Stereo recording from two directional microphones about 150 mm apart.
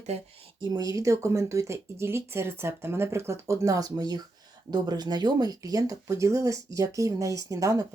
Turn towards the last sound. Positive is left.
turn(degrees=-20)  # may be behind; listen again after turning